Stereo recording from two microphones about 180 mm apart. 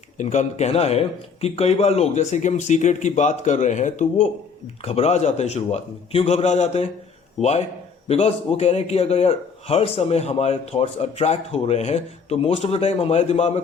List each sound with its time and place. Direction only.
0.2 s a man's voice: 40° left (ahead or behind)